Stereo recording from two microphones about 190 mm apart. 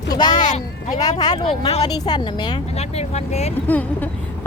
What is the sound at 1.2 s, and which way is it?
Speech, 25° left (ahead or behind).